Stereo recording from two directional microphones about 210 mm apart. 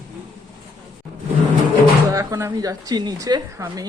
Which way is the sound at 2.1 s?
15° right (ahead or behind).